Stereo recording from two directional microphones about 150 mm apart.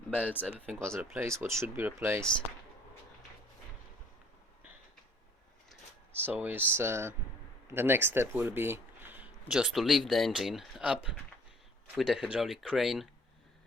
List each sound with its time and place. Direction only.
0.1 s speech: 10° left (ahead or behind)
0.9 s speech: 15° right (ahead or behind)
6.1 s speech: 15° right (ahead or behind)